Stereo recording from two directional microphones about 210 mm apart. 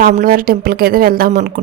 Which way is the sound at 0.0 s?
40° right (ahead or behind).